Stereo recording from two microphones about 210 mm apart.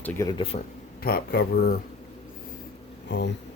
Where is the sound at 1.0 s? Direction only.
45° left (ahead or behind).